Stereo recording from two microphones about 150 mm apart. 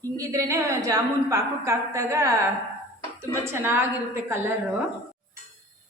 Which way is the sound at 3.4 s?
15° right (ahead or behind).